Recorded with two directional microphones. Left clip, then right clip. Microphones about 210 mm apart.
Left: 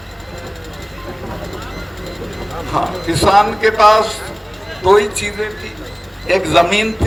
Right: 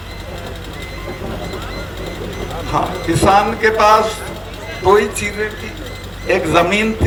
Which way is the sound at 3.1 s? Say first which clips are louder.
Left 1 dB; 45° left (ahead or behind).